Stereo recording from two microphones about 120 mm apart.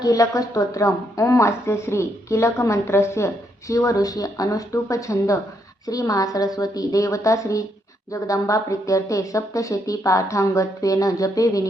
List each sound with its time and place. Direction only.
0.0 s a woman's voice: 30° left (ahead or behind)